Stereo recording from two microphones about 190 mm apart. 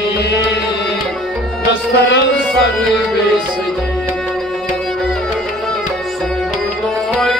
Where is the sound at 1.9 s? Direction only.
65° left (ahead or behind).